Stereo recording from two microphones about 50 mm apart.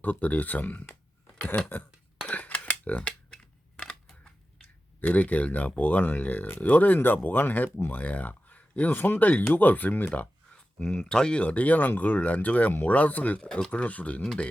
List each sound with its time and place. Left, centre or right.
0.0 s speech: left
2.2 s cutlery: left
3.0 s a sound: left
3.3 s scissors: centre
4.9 s speech: left
10.8 s speech: centre